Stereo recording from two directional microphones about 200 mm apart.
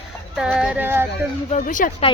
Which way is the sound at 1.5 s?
40° left (ahead or behind).